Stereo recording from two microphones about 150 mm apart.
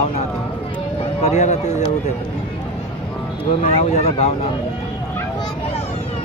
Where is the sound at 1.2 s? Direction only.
50° left (ahead or behind).